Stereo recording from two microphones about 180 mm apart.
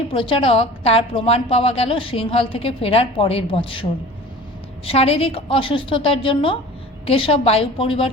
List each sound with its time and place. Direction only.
0.1 s a woman's voice: 30° left (ahead or behind)
4.9 s a woman's voice: 35° left (ahead or behind)